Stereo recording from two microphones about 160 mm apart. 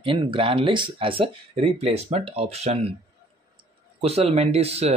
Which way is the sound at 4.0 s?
40° right (ahead or behind).